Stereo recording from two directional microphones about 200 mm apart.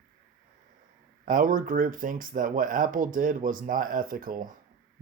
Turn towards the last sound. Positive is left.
turn(degrees=-45)  # may be behind; listen again after turning